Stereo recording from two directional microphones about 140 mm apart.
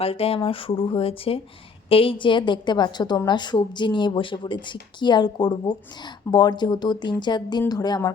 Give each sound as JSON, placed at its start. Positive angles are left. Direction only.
{"t": 0.0, "sound": "speech", "side_deg": 45}